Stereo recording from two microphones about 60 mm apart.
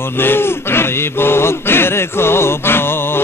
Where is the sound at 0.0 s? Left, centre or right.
Left.